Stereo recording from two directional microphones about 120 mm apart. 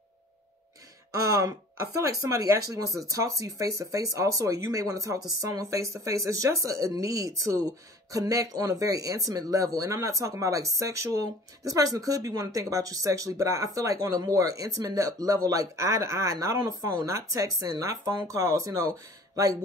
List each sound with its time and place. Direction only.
1.3 s speech: 30° right (ahead or behind)